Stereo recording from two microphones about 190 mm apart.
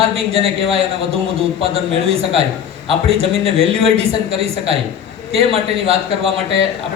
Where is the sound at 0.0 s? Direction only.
30° right (ahead or behind).